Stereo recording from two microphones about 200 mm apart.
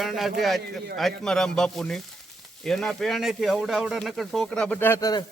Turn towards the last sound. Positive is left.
turn(degrees=15)  # may be behind; listen again after turning